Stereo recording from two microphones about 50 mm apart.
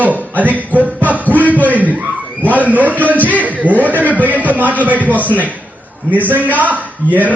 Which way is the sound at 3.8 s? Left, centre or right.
Right.